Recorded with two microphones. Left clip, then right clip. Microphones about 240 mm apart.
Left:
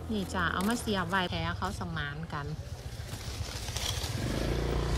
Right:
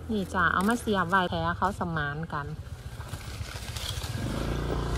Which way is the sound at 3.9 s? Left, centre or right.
Left.